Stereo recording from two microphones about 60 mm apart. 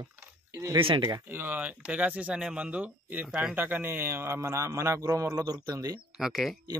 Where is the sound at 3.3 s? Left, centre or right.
Centre.